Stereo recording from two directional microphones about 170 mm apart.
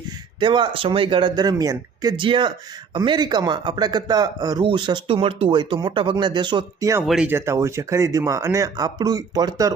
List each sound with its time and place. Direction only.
0.3 s speech: 30° right (ahead or behind)
7.0 s speech: centre (ahead or behind)
7.3 s speech: 15° right (ahead or behind)